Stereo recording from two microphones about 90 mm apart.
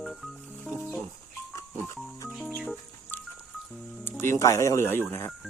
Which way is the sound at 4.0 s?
25° left (ahead or behind).